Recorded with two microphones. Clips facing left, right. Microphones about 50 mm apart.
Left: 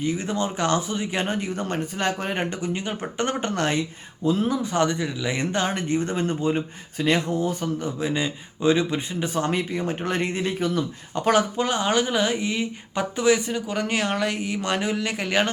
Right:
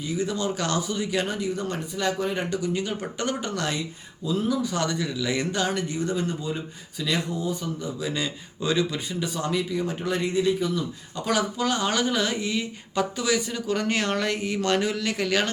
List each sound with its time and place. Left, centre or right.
0.0 s speech: left
8.0 s speech: left
11.6 s speech: left
13.5 s speech: centre